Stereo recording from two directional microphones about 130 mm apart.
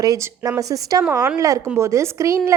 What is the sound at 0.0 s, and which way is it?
A woman's voice, 25° right (ahead or behind).